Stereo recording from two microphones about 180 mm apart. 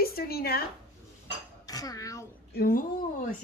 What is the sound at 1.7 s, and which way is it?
Dishes, 20° left (ahead or behind).